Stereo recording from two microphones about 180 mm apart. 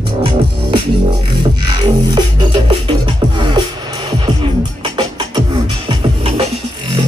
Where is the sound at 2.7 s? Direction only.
25° right (ahead or behind).